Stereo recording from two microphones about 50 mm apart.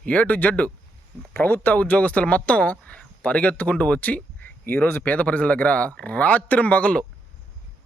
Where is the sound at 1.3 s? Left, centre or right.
Left.